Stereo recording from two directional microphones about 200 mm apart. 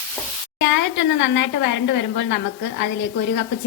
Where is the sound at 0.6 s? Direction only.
65° left (ahead or behind).